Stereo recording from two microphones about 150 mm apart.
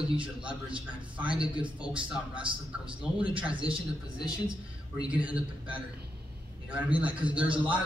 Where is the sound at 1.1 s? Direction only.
5° right (ahead or behind).